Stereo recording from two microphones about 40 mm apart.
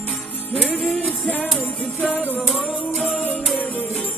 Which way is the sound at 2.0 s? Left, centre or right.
Left.